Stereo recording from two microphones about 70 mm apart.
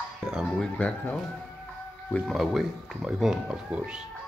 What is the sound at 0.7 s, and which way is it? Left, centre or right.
Speech, left.